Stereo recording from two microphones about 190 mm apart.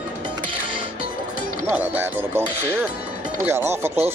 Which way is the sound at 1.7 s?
10° right (ahead or behind).